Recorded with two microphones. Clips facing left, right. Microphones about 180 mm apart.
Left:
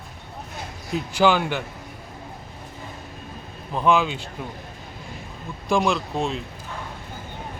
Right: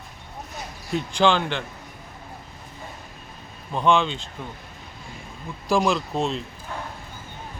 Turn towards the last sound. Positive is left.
turn(degrees=0)  # may be behind; listen again after turning